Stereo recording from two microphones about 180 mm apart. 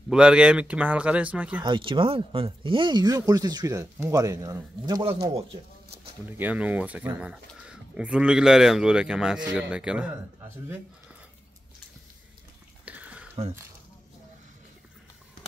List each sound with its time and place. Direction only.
0.1 s speech: 5° right (ahead or behind)
1.6 s speech: 25° right (ahead or behind)
6.2 s speech: 10° right (ahead or behind)
12.8 s a sound: 10° right (ahead or behind)